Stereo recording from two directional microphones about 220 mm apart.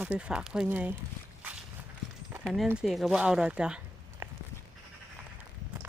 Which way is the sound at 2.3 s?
5° right (ahead or behind).